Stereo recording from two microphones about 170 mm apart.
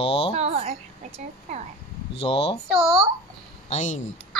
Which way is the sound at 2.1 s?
35° left (ahead or behind).